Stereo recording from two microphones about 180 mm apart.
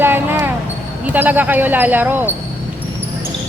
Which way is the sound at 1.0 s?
10° right (ahead or behind).